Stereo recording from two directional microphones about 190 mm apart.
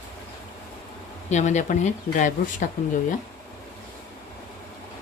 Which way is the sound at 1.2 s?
40° left (ahead or behind).